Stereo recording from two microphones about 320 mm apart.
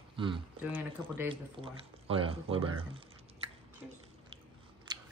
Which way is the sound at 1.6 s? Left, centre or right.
Centre.